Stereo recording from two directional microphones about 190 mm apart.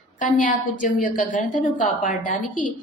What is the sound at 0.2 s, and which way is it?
A woman's voice, 40° left (ahead or behind).